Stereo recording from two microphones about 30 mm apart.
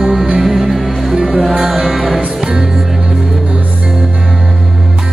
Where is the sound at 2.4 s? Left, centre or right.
Right.